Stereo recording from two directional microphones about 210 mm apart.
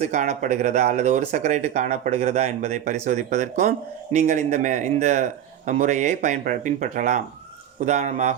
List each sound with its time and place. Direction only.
0.0 s speech: 35° right (ahead or behind)